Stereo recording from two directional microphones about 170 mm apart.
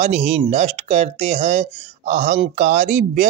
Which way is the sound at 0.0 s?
40° right (ahead or behind).